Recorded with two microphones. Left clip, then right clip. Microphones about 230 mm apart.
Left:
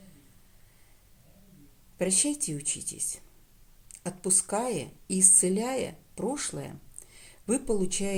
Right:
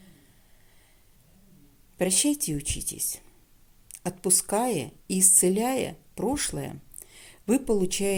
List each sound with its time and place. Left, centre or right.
2.0 s a woman's voice: right
4.0 s a woman's voice: right